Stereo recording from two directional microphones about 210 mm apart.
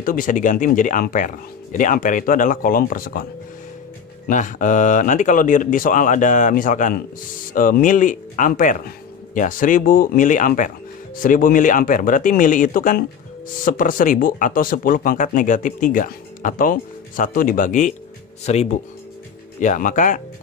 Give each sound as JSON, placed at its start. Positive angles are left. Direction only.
{"t": 0.0, "sound": "speech", "side_deg": 40}
{"t": 4.3, "sound": "speech", "side_deg": 35}